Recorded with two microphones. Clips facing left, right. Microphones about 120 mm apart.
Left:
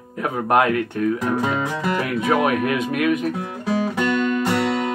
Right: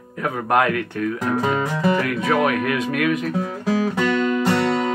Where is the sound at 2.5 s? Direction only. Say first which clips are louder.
Left 1 dB; 20° left (ahead or behind).